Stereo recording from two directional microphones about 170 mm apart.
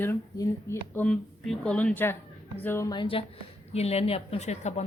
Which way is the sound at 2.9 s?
30° left (ahead or behind).